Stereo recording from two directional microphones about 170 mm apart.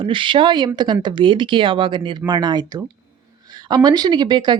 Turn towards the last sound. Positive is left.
turn(degrees=-25)  # may be behind; listen again after turning